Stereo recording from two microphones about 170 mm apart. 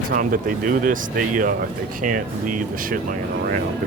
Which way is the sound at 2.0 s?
50° right (ahead or behind).